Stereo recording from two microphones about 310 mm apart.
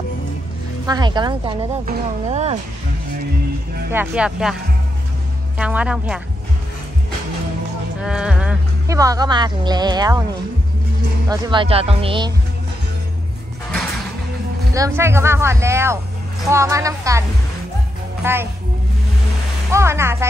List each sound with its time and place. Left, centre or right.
0.8 s speech: centre
3.9 s speech: centre
5.6 s speech: centre
8.0 s speech: centre
11.2 s speech: centre
14.7 s speech: centre
18.2 s speech: centre
19.7 s speech: centre